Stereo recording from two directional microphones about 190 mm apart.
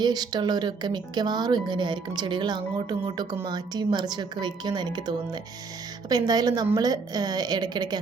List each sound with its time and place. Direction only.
0.0 s speech: 20° right (ahead or behind)